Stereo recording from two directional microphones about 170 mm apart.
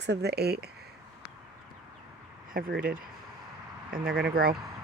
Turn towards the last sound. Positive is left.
turn(degrees=-60)  # may be behind; listen again after turning